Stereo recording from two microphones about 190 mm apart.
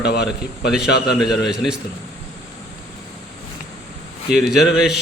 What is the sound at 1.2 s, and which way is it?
Speech, 20° left (ahead or behind).